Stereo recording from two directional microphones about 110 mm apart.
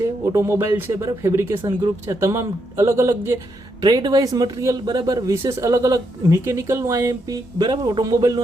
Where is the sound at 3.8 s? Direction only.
40° right (ahead or behind).